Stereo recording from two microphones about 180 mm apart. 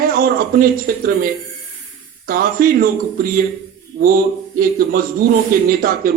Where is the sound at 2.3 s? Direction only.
55° right (ahead or behind).